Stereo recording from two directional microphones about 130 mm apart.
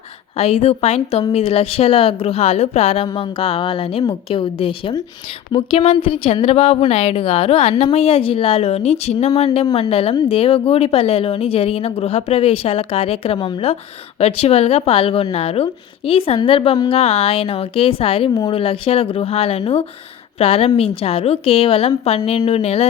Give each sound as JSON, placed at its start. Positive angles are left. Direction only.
{"t": 0.3, "sound": "a woman's voice", "side_deg": 50}